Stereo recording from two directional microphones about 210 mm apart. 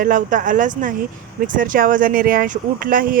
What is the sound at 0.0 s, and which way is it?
Speech, 40° right (ahead or behind).